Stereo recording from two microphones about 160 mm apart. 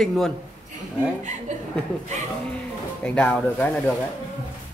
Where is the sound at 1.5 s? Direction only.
45° right (ahead or behind).